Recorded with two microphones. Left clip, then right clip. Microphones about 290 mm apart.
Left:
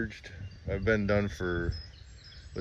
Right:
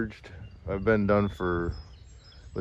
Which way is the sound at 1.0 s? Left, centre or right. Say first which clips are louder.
Right 4 dB; right.